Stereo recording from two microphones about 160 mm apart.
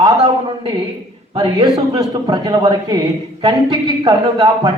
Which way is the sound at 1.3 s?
30° right (ahead or behind).